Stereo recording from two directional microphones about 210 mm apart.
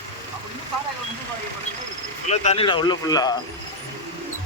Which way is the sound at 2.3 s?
30° left (ahead or behind).